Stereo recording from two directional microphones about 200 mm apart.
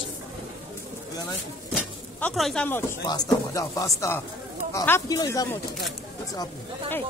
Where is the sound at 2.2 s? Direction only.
Centre (ahead or behind).